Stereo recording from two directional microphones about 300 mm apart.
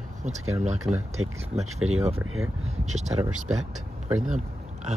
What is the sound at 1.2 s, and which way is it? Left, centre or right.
Speech, right.